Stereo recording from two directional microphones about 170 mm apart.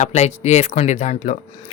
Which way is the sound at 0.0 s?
40° left (ahead or behind).